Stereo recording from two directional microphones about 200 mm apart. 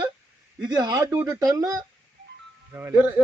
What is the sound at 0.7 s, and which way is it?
A man's voice, 20° right (ahead or behind).